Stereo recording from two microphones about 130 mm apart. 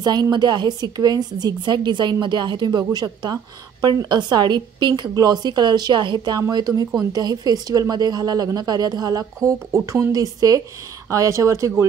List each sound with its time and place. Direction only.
0.0 s a woman's voice: 30° right (ahead or behind)